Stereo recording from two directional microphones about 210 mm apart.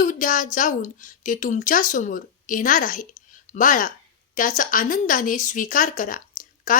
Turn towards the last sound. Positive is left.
turn(degrees=40)  # may be behind; listen again after turning